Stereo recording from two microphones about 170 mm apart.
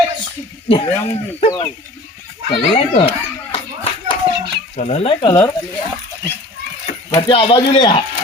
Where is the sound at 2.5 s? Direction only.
35° left (ahead or behind).